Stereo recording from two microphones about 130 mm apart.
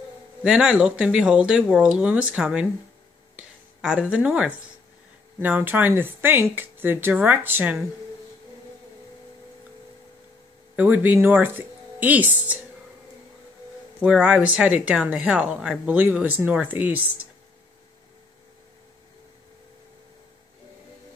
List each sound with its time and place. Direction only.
0.4 s speech: 5° right (ahead or behind)
3.3 s a sound: 5° right (ahead or behind)
5.4 s speech: 15° right (ahead or behind)
10.8 s speech: 15° right (ahead or behind)
14.0 s speech: 5° right (ahead or behind)